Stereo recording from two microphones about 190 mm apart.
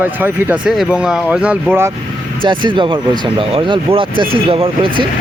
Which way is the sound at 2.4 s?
25° right (ahead or behind).